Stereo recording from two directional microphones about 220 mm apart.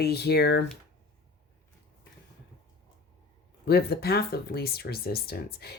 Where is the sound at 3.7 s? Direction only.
45° left (ahead or behind).